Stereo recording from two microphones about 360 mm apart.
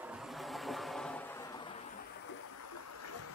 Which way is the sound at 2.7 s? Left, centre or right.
Left.